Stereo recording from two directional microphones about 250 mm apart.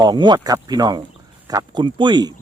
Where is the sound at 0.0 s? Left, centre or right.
Centre.